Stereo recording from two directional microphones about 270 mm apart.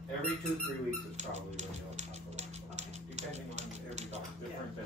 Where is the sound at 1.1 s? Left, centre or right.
Right.